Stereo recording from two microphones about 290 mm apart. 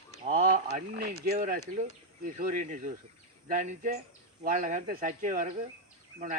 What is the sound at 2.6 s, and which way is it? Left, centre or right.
Speech, right.